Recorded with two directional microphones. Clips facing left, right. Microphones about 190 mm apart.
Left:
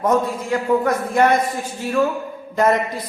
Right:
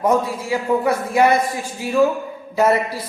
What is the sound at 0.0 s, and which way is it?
A man's voice, 10° right (ahead or behind).